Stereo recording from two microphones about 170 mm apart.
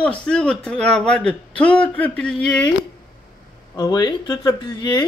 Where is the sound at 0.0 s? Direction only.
5° left (ahead or behind).